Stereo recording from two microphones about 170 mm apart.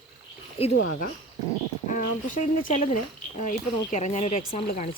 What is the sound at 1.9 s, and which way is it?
Speech, 50° left (ahead or behind).